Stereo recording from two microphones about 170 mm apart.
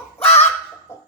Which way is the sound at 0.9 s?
15° left (ahead or behind).